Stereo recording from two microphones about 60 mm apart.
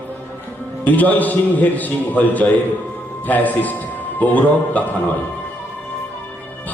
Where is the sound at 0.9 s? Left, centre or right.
Left.